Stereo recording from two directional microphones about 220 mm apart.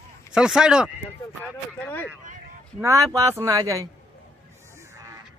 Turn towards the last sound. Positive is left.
turn(degrees=-15)  # may be behind; listen again after turning